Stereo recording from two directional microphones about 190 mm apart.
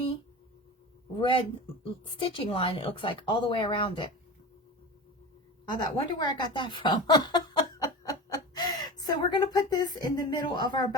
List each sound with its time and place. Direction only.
1.1 s speech: 25° left (ahead or behind)
5.7 s speech: 25° left (ahead or behind)